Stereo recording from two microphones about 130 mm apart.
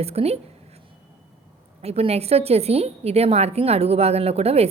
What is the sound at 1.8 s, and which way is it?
A woman's voice, 50° right (ahead or behind).